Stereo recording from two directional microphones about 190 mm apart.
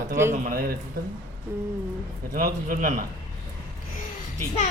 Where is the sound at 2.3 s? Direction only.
45° right (ahead or behind).